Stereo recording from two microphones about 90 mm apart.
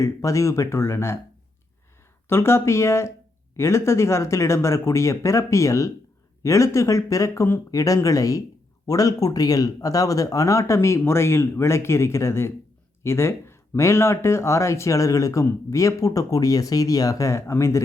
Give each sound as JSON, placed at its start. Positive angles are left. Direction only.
{"t": 0.0, "sound": "speech", "side_deg": 35}
{"t": 2.3, "sound": "speech", "side_deg": 30}